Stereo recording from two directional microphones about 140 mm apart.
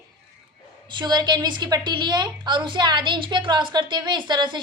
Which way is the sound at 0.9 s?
30° right (ahead or behind).